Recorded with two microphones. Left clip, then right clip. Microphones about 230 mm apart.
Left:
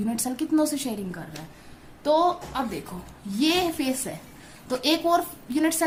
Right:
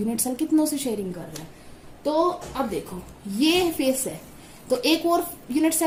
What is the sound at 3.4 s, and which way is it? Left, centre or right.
A woman's voice, left.